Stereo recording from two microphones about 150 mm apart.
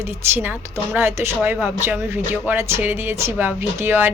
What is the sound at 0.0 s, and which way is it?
A woman's voice, 15° right (ahead or behind).